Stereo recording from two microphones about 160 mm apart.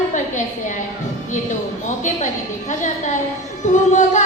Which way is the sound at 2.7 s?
50° left (ahead or behind).